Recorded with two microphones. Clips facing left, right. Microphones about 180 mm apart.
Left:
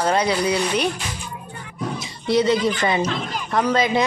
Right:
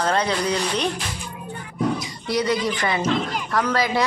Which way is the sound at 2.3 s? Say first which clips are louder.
Left 4 dB; 25° left (ahead or behind).